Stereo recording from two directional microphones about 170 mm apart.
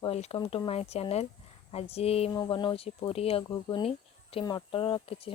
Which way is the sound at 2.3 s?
25° left (ahead or behind).